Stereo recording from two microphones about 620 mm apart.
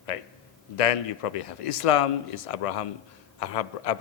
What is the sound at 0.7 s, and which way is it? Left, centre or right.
A man's voice, left.